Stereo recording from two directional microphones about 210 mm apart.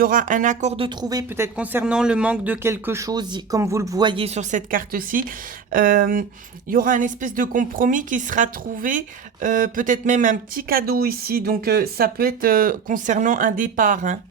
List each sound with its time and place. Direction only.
0.0 s a woman's voice: 40° right (ahead or behind)